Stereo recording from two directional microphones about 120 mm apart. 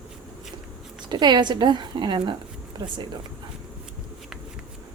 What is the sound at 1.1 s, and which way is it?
A woman's voice, 40° right (ahead or behind).